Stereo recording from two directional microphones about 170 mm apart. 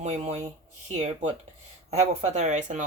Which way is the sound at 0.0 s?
40° right (ahead or behind).